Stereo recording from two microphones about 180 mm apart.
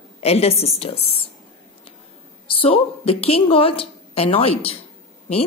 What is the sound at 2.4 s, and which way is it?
A woman's voice, 30° left (ahead or behind).